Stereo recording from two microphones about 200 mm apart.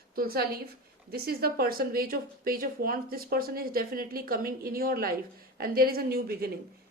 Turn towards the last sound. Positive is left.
turn(degrees=-50)  # may be behind; listen again after turning